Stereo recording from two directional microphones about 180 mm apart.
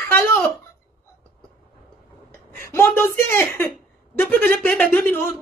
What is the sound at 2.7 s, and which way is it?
Speech, 15° left (ahead or behind).